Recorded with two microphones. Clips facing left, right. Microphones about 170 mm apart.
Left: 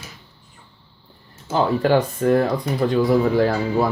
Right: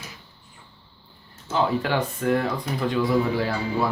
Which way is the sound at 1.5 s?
40° left (ahead or behind).